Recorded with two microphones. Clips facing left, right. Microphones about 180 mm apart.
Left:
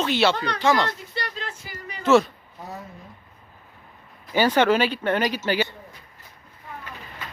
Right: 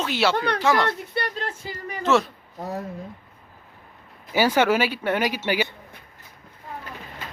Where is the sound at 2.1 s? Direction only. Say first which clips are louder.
Left 3 dB; centre (ahead or behind).